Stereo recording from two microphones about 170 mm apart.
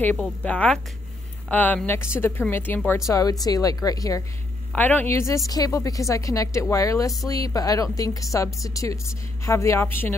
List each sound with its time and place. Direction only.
0.0 s a woman's voice: 10° left (ahead or behind)
4.7 s a woman's voice: 10° left (ahead or behind)